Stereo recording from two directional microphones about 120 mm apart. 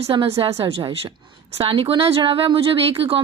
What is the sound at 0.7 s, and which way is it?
Speech, 55° right (ahead or behind).